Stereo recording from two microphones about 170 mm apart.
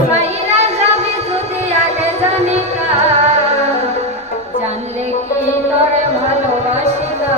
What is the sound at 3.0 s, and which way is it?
Music, 40° right (ahead or behind).